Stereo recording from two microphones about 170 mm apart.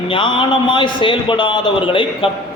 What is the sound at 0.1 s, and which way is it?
A man's voice, 30° left (ahead or behind).